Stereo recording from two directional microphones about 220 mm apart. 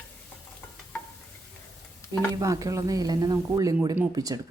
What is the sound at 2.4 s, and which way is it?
Speech, 15° right (ahead or behind).